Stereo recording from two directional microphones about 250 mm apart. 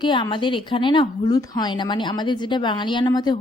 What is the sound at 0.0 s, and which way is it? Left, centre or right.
A woman's voice, centre.